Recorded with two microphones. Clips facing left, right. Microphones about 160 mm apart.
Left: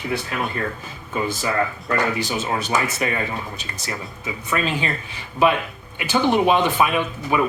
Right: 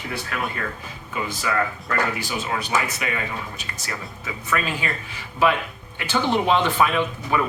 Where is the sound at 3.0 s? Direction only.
35° left (ahead or behind).